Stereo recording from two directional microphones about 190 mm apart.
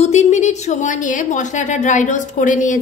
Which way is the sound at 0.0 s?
35° left (ahead or behind).